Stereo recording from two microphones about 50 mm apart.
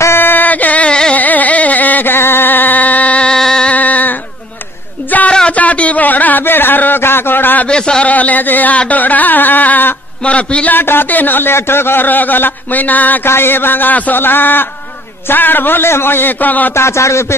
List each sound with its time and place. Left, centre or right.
0.2 s a sound: left
1.1 s carnatic music: left
2.1 s music: left
3.3 s music: centre
3.6 s a sound: left
5.3 s a sound: centre
5.6 s speech: left
7.6 s a man's voice: centre
8.1 s speech: left
10.2 s a man's voice: left
10.7 s speech: left
13.2 s a man's voice: left
16.7 s a man's voice: left